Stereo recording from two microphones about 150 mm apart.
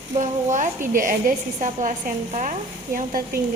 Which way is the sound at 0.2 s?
55° right (ahead or behind).